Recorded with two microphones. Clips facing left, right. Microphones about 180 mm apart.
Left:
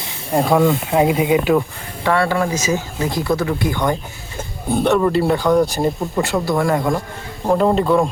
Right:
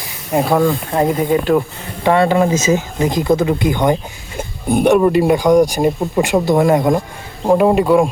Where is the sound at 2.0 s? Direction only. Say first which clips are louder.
Right 5 dB; 20° right (ahead or behind).